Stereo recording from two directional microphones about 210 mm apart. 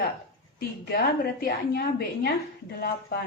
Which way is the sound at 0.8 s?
50° left (ahead or behind).